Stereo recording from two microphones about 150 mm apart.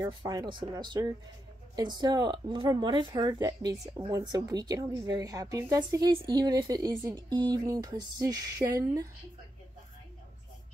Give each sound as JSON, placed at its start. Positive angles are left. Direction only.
{"t": 0.0, "sound": "speech", "side_deg": -25}